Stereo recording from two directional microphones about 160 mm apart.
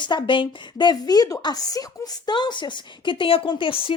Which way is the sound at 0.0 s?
30° left (ahead or behind).